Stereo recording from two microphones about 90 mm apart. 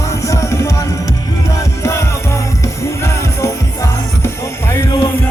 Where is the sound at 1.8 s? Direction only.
35° left (ahead or behind).